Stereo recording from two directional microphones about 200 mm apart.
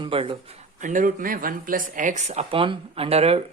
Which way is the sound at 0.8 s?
40° right (ahead or behind).